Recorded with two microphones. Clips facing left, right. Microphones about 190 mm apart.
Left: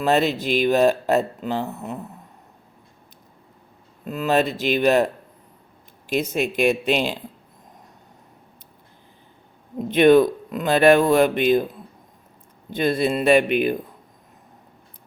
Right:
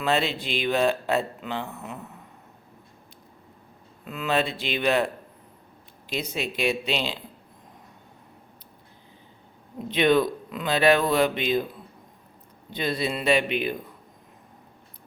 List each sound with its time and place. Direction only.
0.0 s speech: 45° left (ahead or behind)
4.0 s speech: 40° left (ahead or behind)
9.7 s speech: 50° left (ahead or behind)
12.7 s speech: 50° left (ahead or behind)